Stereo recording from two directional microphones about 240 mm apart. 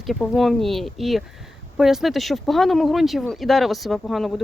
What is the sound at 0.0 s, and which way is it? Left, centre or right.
Speech, centre.